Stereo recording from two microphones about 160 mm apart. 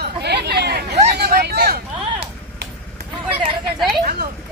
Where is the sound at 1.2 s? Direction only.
85° right.